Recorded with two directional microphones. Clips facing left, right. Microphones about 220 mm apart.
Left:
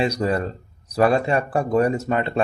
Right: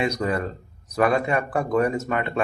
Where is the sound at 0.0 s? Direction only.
30° left (ahead or behind).